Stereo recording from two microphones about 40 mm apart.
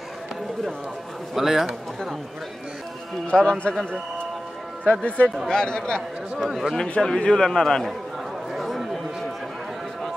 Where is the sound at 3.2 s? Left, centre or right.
Left.